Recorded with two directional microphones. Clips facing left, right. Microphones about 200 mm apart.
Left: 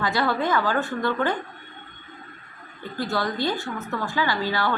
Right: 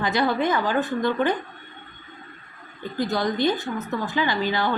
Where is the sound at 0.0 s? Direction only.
20° right (ahead or behind).